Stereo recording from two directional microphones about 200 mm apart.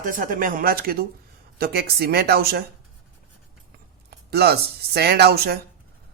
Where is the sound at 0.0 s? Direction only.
40° right (ahead or behind).